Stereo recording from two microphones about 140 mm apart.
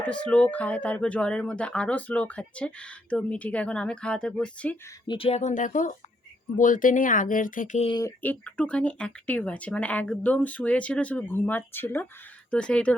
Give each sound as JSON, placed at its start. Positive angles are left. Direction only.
{"t": 0.0, "sound": "speech", "side_deg": 10}
{"t": 5.0, "sound": "speech", "side_deg": 40}
{"t": 5.4, "sound": "speech", "side_deg": 60}
{"t": 8.2, "sound": "speech", "side_deg": 10}